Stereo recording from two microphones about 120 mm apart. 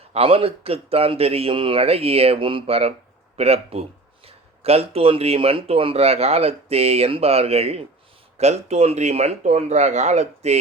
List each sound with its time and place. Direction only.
0.1 s speech: 55° right (ahead or behind); by 10.6 s 70° right (ahead or behind)